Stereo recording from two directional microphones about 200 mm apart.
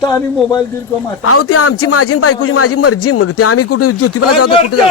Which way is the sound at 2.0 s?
90° left.